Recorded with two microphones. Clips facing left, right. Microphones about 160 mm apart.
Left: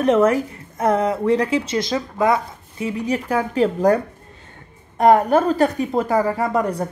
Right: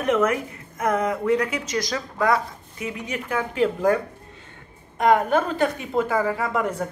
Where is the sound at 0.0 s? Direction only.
30° left (ahead or behind).